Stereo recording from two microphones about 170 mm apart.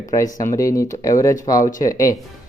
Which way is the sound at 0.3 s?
20° left (ahead or behind).